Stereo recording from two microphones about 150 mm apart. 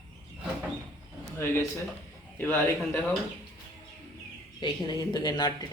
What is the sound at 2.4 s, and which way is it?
Speech, 10° left (ahead or behind).